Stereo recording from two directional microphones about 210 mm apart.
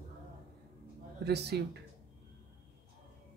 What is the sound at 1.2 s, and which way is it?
Speech, 50° right (ahead or behind).